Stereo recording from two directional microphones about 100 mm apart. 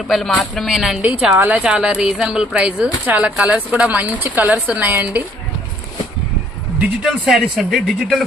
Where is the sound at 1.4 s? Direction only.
15° right (ahead or behind).